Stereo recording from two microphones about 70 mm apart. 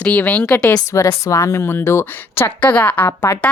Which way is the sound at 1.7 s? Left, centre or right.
Left.